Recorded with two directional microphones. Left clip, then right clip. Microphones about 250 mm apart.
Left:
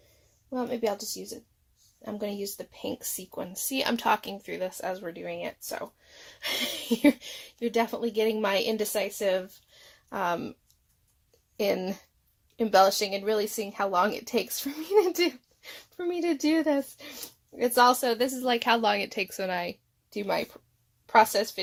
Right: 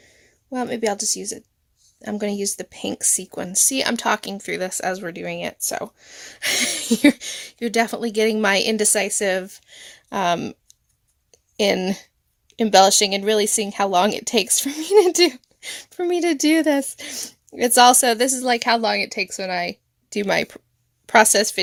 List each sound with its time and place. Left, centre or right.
0.5 s speech: right
11.3 s a sound: right
12.5 s speech: right; by 19.7 s centre
20.1 s speech: right